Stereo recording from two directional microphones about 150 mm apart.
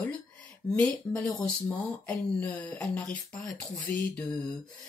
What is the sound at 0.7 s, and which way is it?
Speech, 10° left (ahead or behind).